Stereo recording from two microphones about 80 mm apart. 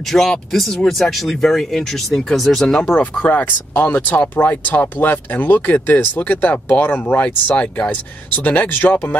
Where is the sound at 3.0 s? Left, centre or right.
Centre.